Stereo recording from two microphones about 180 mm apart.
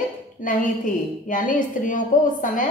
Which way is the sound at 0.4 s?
45° left (ahead or behind).